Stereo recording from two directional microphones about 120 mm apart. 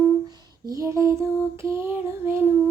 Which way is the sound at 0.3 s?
25° right (ahead or behind).